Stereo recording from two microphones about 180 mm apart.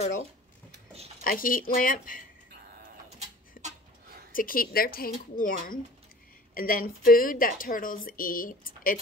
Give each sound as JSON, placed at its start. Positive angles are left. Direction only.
{"t": 1.2, "sound": "a woman's voice", "side_deg": 50}
{"t": 3.6, "sound": "a sound", "side_deg": 55}
{"t": 4.3, "sound": "a woman's voice", "side_deg": 50}